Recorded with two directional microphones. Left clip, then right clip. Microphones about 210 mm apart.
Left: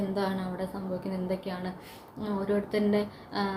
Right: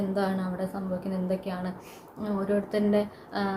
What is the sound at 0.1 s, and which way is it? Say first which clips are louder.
A woman's voice: right 2 dB; 10° right (ahead or behind).